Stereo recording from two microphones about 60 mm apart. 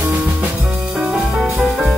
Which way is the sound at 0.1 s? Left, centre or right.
Right.